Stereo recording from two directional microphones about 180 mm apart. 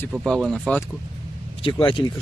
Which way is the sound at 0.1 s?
Centre (ahead or behind).